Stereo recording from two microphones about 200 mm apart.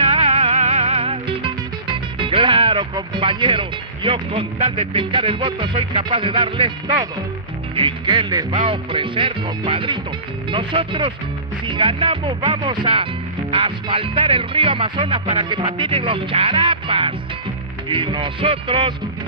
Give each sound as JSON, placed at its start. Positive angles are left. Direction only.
{"t": 0.0, "sound": "music", "side_deg": -30}
{"t": 7.7, "sound": "speech", "side_deg": -25}